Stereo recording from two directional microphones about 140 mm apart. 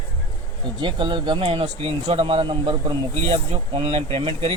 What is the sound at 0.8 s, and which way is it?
Speech, 35° right (ahead or behind).